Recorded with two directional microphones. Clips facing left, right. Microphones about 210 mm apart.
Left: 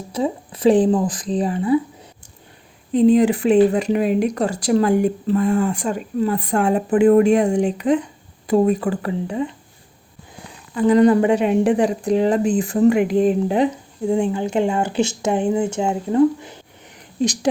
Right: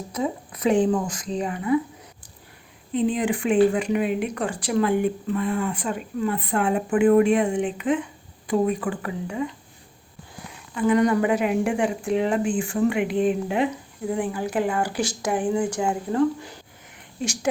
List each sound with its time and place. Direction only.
0.1 s speech: 30° left (ahead or behind)
2.9 s speech: 40° left (ahead or behind)
10.8 s speech: 35° left (ahead or behind)
14.1 s speech: 25° left (ahead or behind)
17.2 s speech: 35° left (ahead or behind)